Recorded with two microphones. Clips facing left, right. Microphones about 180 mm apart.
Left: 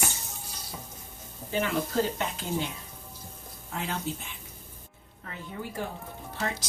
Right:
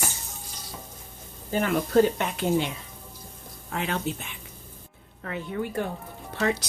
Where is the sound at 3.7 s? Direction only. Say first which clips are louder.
Right 4 dB; 65° right (ahead or behind).